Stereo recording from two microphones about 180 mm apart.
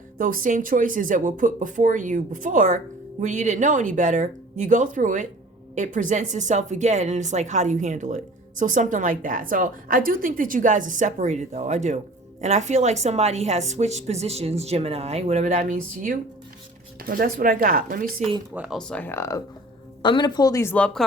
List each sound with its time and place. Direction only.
0.2 s a woman's voice: 50° right (ahead or behind)
18.2 s speech: 30° right (ahead or behind)
18.5 s speech: 5° right (ahead or behind)
18.8 s a woman's voice: 5° left (ahead or behind)